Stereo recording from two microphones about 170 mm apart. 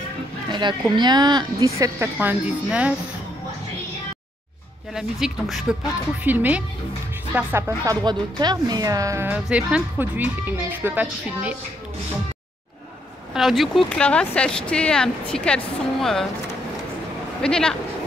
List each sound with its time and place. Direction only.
0.5 s speech: 25° right (ahead or behind); by 3.0 s 5° right (ahead or behind)
4.9 s speech: 5° right (ahead or behind)
13.3 s speech: centre (ahead or behind)
17.4 s speech: 5° left (ahead or behind)